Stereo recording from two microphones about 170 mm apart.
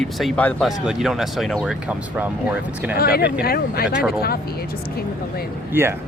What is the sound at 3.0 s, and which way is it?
Speech, 65° left (ahead or behind).